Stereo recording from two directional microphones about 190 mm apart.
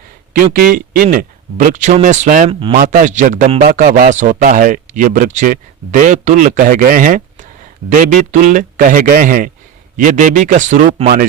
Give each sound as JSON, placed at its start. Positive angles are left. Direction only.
{"t": 0.5, "sound": "speech", "side_deg": -50}
{"t": 2.5, "sound": "speech", "side_deg": -30}
{"t": 2.7, "sound": "speech", "side_deg": -45}